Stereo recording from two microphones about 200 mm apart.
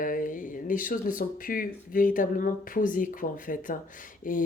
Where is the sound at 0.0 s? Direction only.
45° left (ahead or behind).